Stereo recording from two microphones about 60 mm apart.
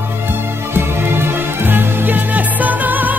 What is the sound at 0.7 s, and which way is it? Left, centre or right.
Music, right.